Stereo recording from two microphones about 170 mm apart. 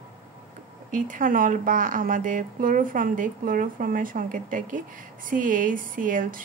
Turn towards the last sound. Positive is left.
turn(degrees=-55)  # may be behind; listen again after turning